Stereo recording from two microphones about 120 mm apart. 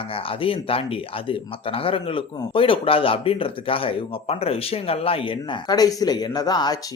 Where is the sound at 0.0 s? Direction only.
50° left (ahead or behind).